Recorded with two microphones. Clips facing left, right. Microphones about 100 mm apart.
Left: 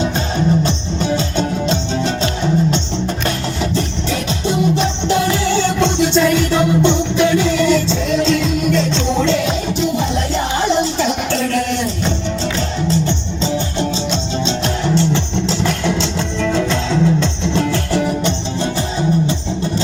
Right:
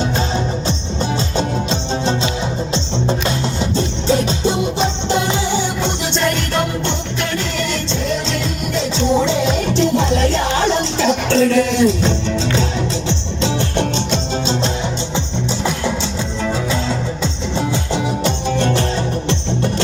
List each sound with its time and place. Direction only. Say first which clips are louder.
1.1 s music: left 1 dB; 35° right (ahead or behind)
3.6 s music: even; 30° right (ahead or behind)
5.5 s music: left 4 dB; 10° right (ahead or behind)
6.1 s music: left 4 dB; 5° left (ahead or behind); by 9.4 s 10° right (ahead or behind)
9.7 s music: right 2 dB; 5° left (ahead or behind)
13.1 s music: even; 90° right
16.4 s music: left 3 dB; 10° right (ahead or behind)